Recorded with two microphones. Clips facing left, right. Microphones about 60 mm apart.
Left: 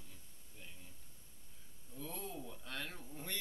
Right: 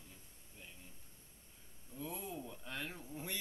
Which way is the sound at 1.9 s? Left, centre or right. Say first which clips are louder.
Right 1 dB; centre.